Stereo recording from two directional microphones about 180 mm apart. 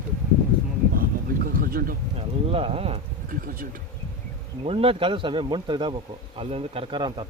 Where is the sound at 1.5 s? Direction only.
55° right (ahead or behind).